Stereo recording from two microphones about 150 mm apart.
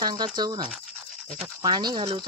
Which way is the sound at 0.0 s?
30° right (ahead or behind).